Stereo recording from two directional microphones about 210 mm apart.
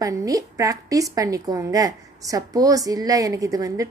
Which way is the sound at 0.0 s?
15° right (ahead or behind).